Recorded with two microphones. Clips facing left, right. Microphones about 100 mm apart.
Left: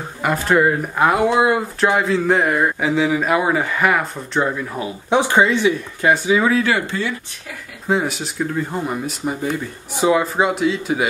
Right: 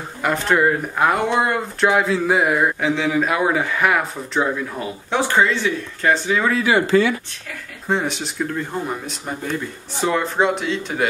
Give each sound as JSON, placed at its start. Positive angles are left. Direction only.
{"t": 0.2, "sound": "speech", "side_deg": 5}
{"t": 5.1, "sound": "speech", "side_deg": 15}
{"t": 6.9, "sound": "speech", "side_deg": -90}
{"t": 7.9, "sound": "speech", "side_deg": 5}